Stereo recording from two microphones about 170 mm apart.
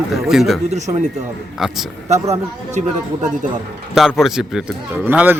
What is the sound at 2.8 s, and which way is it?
Speech, 45° right (ahead or behind).